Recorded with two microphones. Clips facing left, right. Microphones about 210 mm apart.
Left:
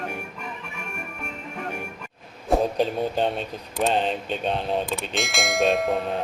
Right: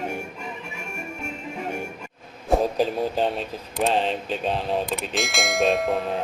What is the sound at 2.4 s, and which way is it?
Speech, centre (ahead or behind).